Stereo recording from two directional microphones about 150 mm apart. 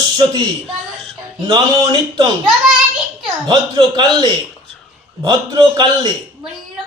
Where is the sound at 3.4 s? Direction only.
30° right (ahead or behind).